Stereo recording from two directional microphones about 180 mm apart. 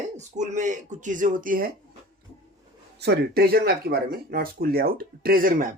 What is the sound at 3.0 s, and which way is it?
Speech, 65° right (ahead or behind).